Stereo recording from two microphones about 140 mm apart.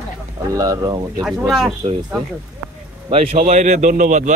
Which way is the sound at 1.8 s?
45° right (ahead or behind).